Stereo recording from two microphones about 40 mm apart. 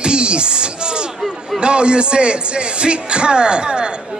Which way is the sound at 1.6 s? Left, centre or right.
Right.